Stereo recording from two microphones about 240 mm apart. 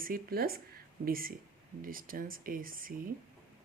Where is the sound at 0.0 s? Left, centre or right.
Right.